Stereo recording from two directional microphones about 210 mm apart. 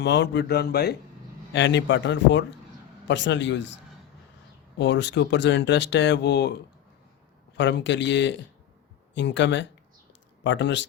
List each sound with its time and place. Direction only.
0.0 s speech: 55° left (ahead or behind)
4.8 s speech: 55° left (ahead or behind)
7.5 s speech: 55° left (ahead or behind)
10.1 s a sound: 60° left (ahead or behind)